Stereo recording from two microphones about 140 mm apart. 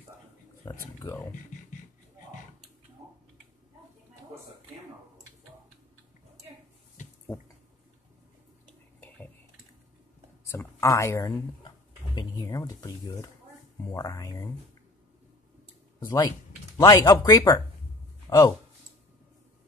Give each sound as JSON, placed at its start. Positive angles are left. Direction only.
{"t": 0.7, "sound": "speech", "side_deg": 20}
{"t": 10.5, "sound": "speech", "side_deg": 20}
{"t": 16.1, "sound": "speech", "side_deg": 20}